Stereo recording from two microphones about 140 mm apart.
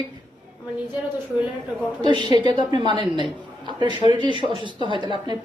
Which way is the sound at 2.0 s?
35° right (ahead or behind).